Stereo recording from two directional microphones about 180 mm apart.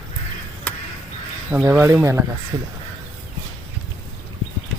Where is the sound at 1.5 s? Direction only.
10° right (ahead or behind).